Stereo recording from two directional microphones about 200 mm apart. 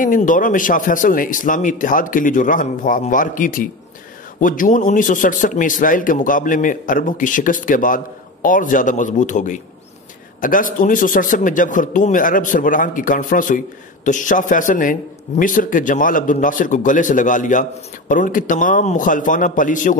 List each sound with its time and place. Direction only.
0.0 s a man's voice: 40° left (ahead or behind)